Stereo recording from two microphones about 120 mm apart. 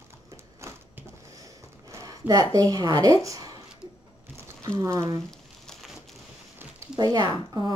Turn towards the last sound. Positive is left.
turn(degrees=-35)  # may be behind; listen again after turning